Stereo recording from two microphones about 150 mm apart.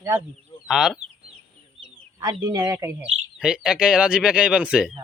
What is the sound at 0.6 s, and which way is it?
Speech, 5° right (ahead or behind).